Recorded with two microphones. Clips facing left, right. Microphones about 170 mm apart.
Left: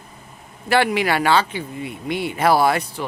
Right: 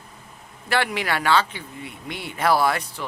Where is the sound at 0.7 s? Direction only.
10° left (ahead or behind).